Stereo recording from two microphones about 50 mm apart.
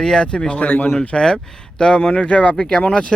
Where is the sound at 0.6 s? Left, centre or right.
Left.